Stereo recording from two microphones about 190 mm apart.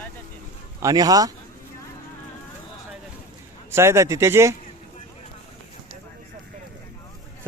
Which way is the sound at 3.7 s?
15° right (ahead or behind).